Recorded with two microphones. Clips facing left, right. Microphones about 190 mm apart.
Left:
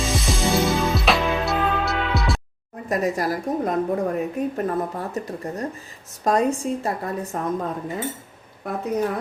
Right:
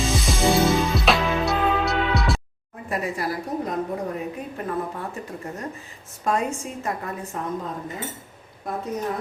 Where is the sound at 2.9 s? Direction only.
40° left (ahead or behind).